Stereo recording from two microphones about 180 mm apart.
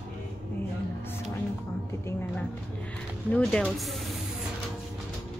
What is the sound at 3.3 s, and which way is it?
Music, 5° left (ahead or behind).